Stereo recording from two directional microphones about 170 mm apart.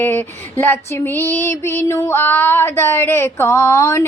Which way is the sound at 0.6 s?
15° left (ahead or behind).